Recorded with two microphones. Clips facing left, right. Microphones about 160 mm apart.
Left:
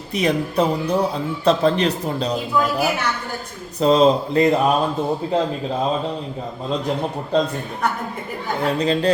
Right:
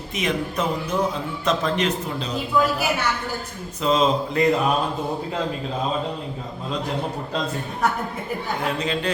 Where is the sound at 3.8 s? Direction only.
35° left (ahead or behind).